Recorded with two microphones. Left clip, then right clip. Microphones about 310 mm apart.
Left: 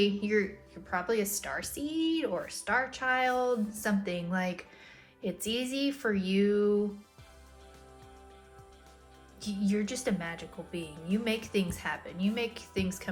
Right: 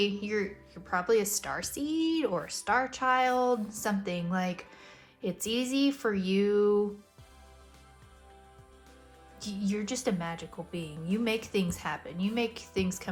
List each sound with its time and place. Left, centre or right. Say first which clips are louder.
0.0 s a woman's voice: left 2 dB; centre
9.4 s a woman's voice: left 2 dB; centre